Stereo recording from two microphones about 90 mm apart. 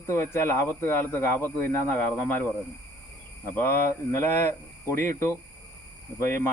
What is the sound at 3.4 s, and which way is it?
Speech, 20° left (ahead or behind).